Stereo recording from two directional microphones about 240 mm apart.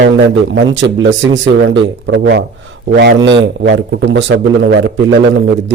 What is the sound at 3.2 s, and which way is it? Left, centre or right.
Speech, centre.